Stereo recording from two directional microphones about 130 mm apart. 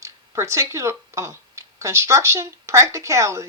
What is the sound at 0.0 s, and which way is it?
Speech, 20° right (ahead or behind).